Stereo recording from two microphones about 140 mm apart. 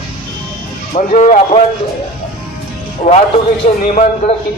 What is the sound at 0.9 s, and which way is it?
Speech, 65° left (ahead or behind).